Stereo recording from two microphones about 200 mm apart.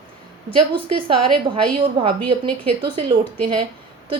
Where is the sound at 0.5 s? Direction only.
25° right (ahead or behind).